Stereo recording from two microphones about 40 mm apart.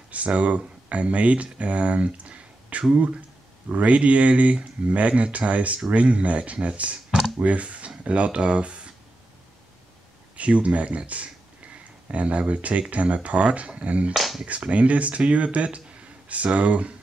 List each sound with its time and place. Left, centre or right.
0.1 s speech: right
10.3 s speech: right
14.1 s speech: centre
14.4 s speech: right